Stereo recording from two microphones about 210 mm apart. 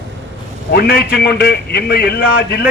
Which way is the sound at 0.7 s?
50° left (ahead or behind).